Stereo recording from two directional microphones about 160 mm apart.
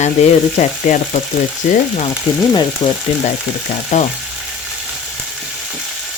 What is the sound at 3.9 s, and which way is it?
Speech, 45° left (ahead or behind).